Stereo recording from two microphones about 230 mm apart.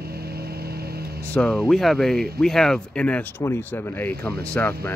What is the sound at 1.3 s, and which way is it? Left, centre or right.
Speech, centre.